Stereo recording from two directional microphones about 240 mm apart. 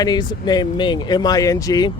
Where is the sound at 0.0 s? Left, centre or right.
Centre.